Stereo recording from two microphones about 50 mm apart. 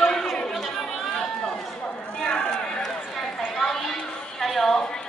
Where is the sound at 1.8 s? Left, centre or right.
Centre.